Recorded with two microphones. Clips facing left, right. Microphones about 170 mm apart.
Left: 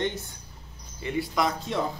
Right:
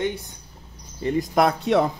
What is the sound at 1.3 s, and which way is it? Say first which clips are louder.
Speech: right 10 dB; 60° right (ahead or behind).